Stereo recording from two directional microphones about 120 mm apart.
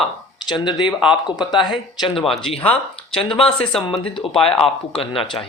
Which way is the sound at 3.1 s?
50° left (ahead or behind).